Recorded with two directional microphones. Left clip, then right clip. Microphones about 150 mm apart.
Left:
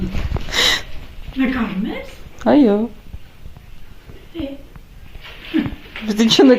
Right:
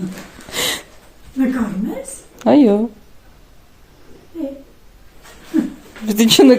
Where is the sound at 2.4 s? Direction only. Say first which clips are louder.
Right 1 dB; 15° right (ahead or behind).